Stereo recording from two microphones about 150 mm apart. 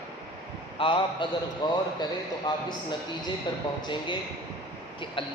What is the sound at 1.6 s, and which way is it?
Speech, 30° left (ahead or behind).